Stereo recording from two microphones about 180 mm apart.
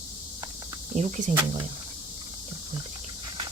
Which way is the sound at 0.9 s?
45° right (ahead or behind).